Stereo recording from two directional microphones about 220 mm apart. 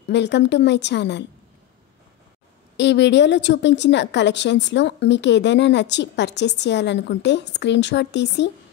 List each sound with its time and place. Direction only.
0.1 s a woman's voice: 50° left (ahead or behind)
2.8 s a woman's voice: 55° left (ahead or behind)